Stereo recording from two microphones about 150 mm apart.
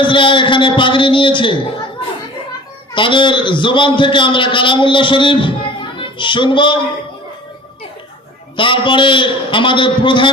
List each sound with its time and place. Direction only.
0.0 s a man's voice: 35° left (ahead or behind)
2.9 s a man's voice: 35° left (ahead or behind)
8.5 s a man's voice: 35° left (ahead or behind)